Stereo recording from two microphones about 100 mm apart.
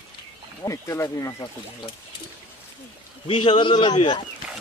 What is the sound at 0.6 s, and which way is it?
Speech, 30° left (ahead or behind).